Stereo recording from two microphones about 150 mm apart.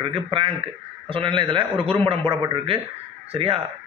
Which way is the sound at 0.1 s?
35° right (ahead or behind).